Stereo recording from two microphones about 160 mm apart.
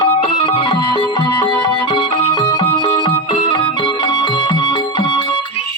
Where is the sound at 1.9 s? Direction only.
30° left (ahead or behind).